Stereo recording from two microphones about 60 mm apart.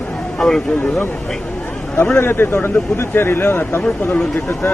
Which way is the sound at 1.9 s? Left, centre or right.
Left.